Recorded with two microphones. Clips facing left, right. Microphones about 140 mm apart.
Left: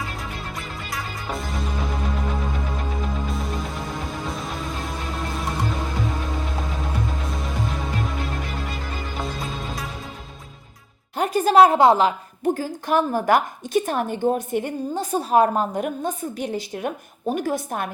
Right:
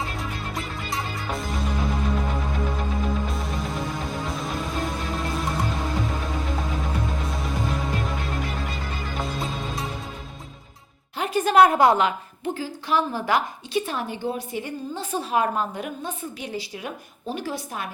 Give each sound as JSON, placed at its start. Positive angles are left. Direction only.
{"t": 1.3, "sound": "music", "side_deg": 0}
{"t": 3.2, "sound": "music", "side_deg": 0}
{"t": 6.6, "sound": "music", "side_deg": 0}
{"t": 11.2, "sound": "a woman's voice", "side_deg": 35}
{"t": 12.5, "sound": "a woman's voice", "side_deg": 50}